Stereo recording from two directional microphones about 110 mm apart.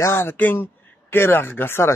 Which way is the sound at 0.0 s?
20° left (ahead or behind).